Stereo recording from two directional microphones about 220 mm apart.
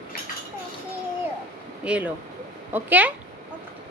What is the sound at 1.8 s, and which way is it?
A woman's voice, 5° right (ahead or behind).